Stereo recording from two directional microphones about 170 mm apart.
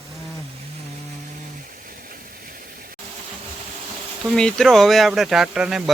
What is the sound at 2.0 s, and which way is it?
Vehicle, 60° right (ahead or behind).